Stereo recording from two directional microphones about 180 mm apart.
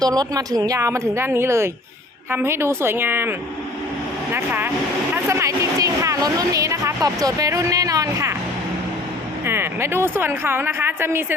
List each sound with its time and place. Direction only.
0.0 s a woman's voice: 20° right (ahead or behind)
9.5 s a woman's voice: 15° right (ahead or behind)